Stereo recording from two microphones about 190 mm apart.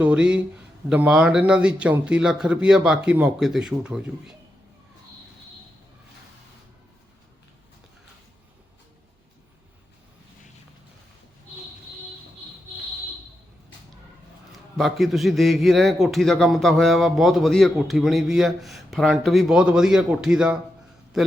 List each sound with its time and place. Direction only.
0.0 s speech: 5° right (ahead or behind)
14.8 s a man's voice: centre (ahead or behind)